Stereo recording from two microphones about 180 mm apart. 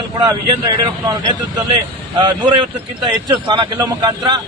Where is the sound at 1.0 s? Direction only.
20° right (ahead or behind).